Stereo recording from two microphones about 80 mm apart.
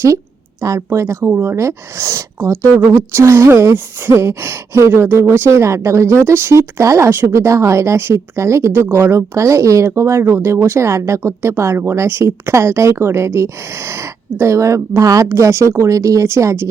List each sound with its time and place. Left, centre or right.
0.6 s a woman's voice: right